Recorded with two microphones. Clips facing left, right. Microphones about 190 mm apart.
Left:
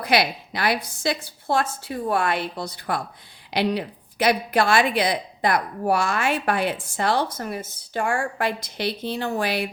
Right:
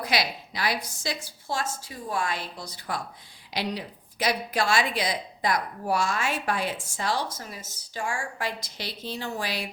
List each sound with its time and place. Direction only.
0.0 s a woman's voice: 60° left (ahead or behind)